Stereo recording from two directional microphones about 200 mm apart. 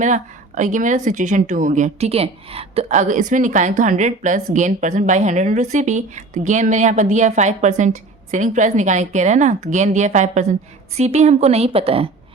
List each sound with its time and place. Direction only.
0.0 s a woman's voice: 40° right (ahead or behind)